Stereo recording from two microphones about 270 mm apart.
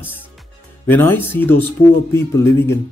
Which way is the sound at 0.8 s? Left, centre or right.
Centre.